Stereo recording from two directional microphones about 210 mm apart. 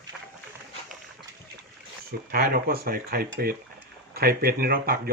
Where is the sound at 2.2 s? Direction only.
45° right (ahead or behind).